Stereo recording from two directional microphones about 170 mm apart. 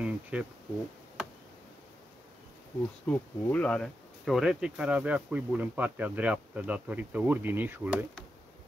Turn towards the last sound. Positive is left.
turn(degrees=-10)  # may be behind; listen again after turning